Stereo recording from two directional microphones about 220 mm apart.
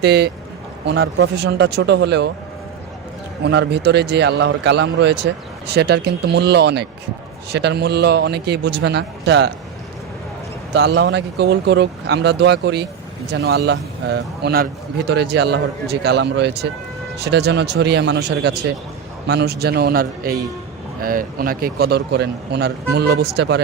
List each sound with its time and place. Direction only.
0.0 s a man's voice: 50° right (ahead or behind)
3.4 s a man's voice: 50° right (ahead or behind)
10.8 s a man's voice: 50° right (ahead or behind)